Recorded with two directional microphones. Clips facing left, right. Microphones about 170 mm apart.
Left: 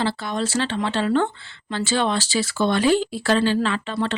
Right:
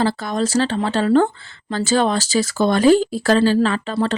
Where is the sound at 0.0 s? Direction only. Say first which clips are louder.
Right 4 dB; 45° right (ahead or behind).